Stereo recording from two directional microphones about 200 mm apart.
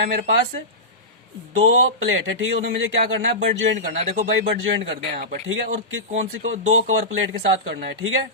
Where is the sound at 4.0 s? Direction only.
30° right (ahead or behind).